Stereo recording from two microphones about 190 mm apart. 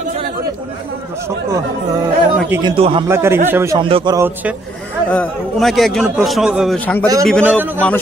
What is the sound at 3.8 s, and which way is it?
Speech, 25° right (ahead or behind).